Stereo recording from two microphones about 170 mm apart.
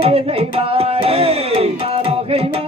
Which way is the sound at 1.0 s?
35° right (ahead or behind).